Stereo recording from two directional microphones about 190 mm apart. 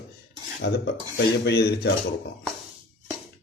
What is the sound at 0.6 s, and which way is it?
Filing, 65° left (ahead or behind).